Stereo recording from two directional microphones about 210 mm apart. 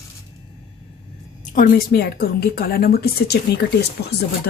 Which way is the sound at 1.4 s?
45° left (ahead or behind).